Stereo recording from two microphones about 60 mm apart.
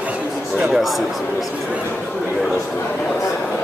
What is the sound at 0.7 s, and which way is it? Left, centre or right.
Speech, centre.